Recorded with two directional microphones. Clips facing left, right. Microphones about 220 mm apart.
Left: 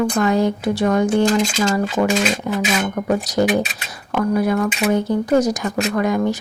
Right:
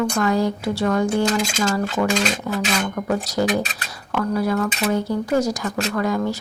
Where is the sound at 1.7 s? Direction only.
20° left (ahead or behind).